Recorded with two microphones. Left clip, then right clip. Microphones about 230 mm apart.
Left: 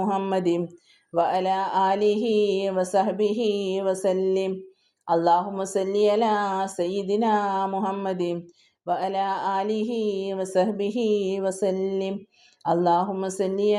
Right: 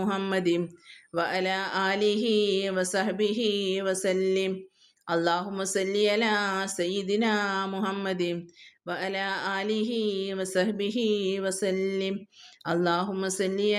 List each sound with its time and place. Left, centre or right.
0.0 s speech: centre